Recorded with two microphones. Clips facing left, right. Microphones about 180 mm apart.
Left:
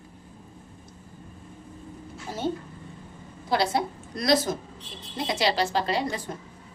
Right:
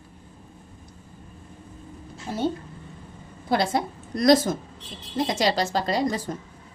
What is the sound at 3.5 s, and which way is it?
A woman's voice, 50° right (ahead or behind).